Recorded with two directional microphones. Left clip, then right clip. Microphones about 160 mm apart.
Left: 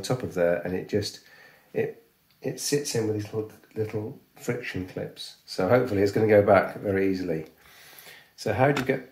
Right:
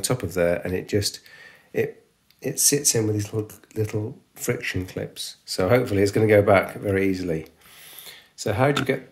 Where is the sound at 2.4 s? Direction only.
80° right.